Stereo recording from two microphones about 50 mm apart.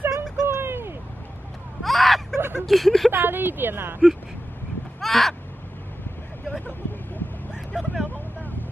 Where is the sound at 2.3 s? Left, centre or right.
Right.